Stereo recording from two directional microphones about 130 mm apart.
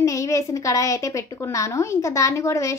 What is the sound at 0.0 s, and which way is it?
A woman's voice, 25° left (ahead or behind).